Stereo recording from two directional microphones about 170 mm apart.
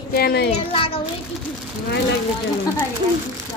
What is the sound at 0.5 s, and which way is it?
Speech, 35° left (ahead or behind).